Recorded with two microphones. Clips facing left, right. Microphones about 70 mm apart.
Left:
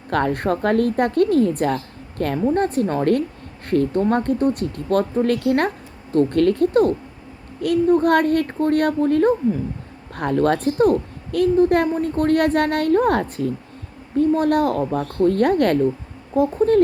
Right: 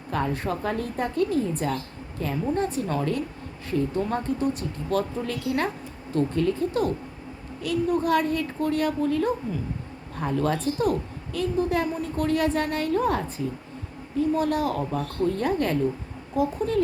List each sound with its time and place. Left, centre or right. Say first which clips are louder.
0.1 s a woman's voice: left 7 dB; left
7.9 s a child's voice: left 9 dB; left
8.1 s a woman's voice: left 6 dB; left
10.2 s a woman's voice: left 7 dB; left
16.3 s speech: left 8 dB; left